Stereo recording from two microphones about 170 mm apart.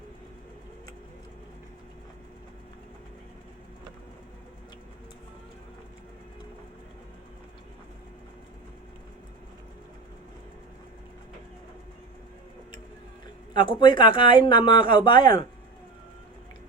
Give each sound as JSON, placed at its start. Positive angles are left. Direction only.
{"t": 13.5, "sound": "speech", "side_deg": 25}